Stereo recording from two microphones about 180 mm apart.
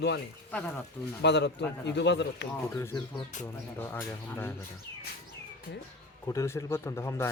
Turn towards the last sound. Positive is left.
turn(degrees=15)  # may be behind; listen again after turning